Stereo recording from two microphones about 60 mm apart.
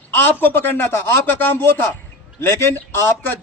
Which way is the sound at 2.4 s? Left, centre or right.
Left.